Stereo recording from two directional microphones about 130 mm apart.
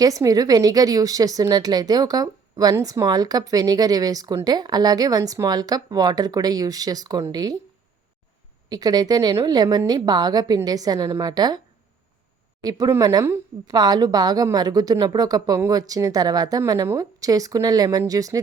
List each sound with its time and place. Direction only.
0.0 s a woman's voice: 25° right (ahead or behind)
8.7 s a woman's voice: 30° right (ahead or behind)
12.6 s a woman's voice: 30° right (ahead or behind)